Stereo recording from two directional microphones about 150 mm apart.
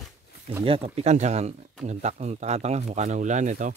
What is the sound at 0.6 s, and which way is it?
Speech, 40° right (ahead or behind).